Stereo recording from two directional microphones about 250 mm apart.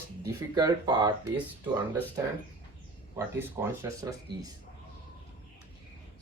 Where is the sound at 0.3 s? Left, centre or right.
Centre.